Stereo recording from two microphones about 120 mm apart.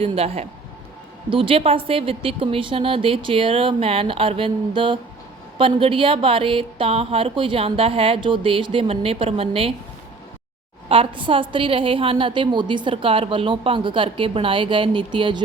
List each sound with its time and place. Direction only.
0.0 s a woman's voice: 55° right (ahead or behind)
10.8 s a woman's voice: 50° right (ahead or behind)